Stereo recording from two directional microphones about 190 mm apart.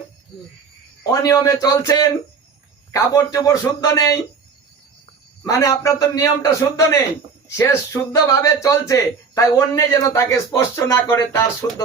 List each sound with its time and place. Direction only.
1.2 s speech: 20° left (ahead or behind)
5.4 s speech: 15° left (ahead or behind)